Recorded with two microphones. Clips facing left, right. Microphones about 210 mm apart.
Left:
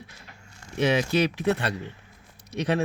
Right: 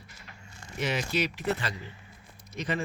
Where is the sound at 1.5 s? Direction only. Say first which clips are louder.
Left 6 dB; 65° left (ahead or behind).